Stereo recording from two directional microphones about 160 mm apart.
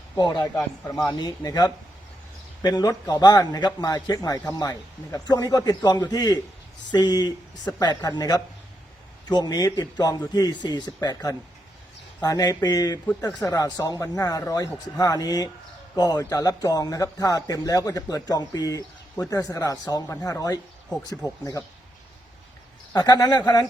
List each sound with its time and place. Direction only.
0.2 s a man's voice: 25° left (ahead or behind)
22.9 s a man's voice: 25° left (ahead or behind)